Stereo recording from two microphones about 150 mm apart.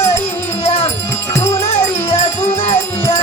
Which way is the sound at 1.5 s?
40° left (ahead or behind).